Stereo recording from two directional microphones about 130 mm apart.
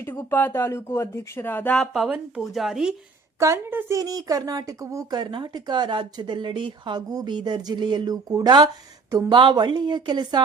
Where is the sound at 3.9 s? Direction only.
25° right (ahead or behind).